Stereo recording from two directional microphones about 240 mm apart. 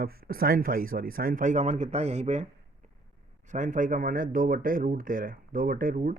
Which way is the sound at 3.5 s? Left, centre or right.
Right.